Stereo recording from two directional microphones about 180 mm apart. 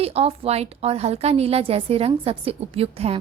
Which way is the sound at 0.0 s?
35° right (ahead or behind).